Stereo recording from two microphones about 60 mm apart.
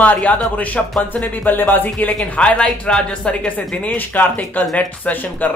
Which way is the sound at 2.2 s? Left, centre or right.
Centre.